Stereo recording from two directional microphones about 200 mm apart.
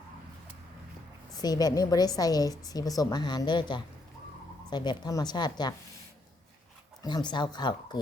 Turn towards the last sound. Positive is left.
turn(degrees=20)  # may be behind; listen again after turning